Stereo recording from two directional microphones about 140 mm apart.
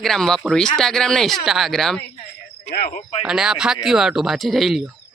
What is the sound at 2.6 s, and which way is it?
Speech, 50° left (ahead or behind).